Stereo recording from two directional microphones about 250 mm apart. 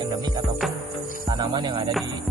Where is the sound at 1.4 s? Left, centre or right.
Centre.